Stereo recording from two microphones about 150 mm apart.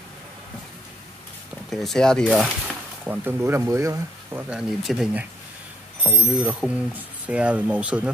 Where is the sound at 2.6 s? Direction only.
10° right (ahead or behind).